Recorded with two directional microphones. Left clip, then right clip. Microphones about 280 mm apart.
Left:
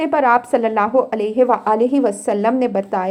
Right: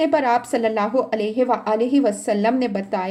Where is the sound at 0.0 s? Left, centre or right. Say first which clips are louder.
Left 3 dB; centre.